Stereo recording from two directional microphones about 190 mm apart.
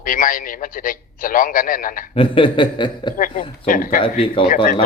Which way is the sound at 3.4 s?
45° left (ahead or behind).